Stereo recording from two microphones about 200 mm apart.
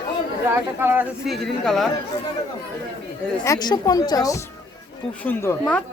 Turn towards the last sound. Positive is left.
turn(degrees=10)  # may be behind; listen again after turning